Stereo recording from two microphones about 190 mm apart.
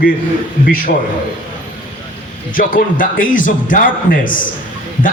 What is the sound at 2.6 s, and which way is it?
A man's voice, 45° left (ahead or behind).